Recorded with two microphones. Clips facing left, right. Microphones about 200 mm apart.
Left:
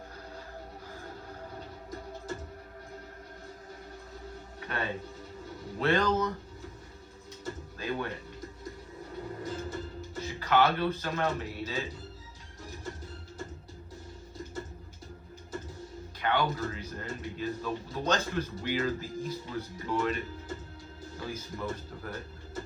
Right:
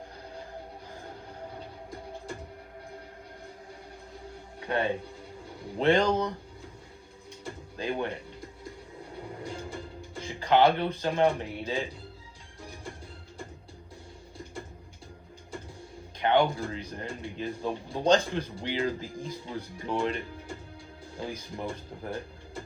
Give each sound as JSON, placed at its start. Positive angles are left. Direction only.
{"t": 1.9, "sound": "music", "side_deg": -15}
{"t": 4.6, "sound": "speech", "side_deg": -15}
{"t": 7.4, "sound": "music", "side_deg": -20}
{"t": 16.2, "sound": "speech", "side_deg": -20}